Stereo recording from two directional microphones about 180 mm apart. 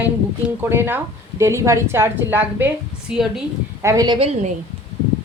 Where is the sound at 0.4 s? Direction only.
15° right (ahead or behind).